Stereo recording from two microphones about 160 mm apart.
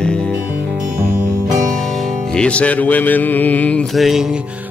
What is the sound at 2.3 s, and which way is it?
Music, 5° left (ahead or behind).